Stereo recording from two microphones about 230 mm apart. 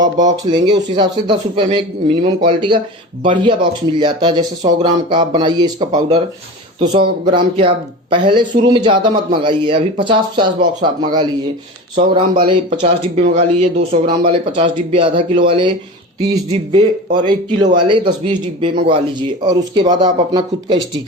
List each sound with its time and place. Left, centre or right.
0.5 s speech: centre